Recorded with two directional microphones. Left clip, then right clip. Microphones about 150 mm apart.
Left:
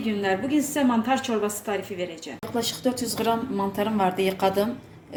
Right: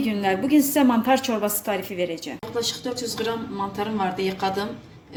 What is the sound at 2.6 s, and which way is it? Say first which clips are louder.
A woman's voice: even; 65° left (ahead or behind).